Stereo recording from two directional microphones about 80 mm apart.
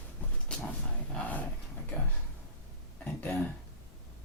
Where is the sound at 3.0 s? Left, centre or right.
Centre.